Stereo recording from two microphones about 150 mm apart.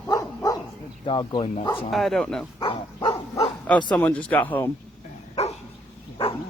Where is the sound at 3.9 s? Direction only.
10° left (ahead or behind).